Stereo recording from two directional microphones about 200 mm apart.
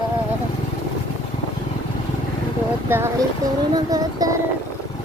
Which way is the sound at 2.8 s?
10° right (ahead or behind).